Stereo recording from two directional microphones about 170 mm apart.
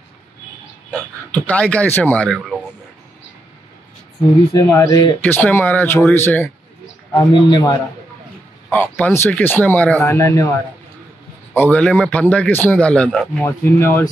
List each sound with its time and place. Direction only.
0.9 s speech: 10° left (ahead or behind)
4.6 s a man's voice: 20° left (ahead or behind)
5.2 s speech: 10° left (ahead or behind)
7.2 s a man's voice: 25° left (ahead or behind)
8.6 s speech: 10° left (ahead or behind)
11.5 s speech: 10° left (ahead or behind)
13.4 s speech: 15° left (ahead or behind)